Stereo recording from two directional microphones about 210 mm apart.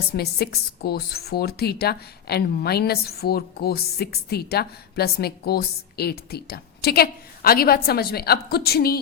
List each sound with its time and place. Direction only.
0.2 s a woman's voice: 50° left (ahead or behind)